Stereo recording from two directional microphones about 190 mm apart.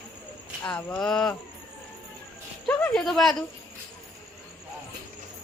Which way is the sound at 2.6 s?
10° left (ahead or behind).